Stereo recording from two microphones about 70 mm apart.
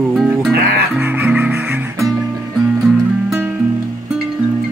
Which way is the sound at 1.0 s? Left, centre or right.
Right.